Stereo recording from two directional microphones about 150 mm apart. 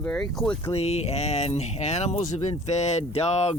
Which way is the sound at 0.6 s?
45° left (ahead or behind).